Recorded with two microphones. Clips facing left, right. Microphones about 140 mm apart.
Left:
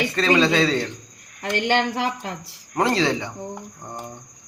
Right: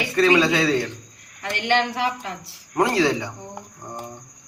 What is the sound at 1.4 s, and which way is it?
Speech, 40° left (ahead or behind).